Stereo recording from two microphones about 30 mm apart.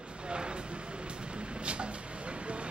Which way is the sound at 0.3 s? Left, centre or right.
Right.